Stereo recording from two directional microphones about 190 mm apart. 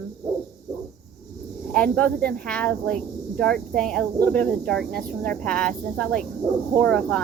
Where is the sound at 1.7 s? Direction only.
5° left (ahead or behind).